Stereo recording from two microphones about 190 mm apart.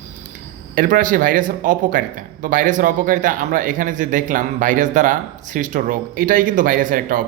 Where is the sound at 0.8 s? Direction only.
45° right (ahead or behind).